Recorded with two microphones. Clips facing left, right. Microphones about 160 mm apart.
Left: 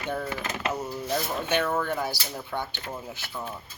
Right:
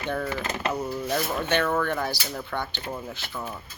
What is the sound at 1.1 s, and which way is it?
Speech, 10° left (ahead or behind).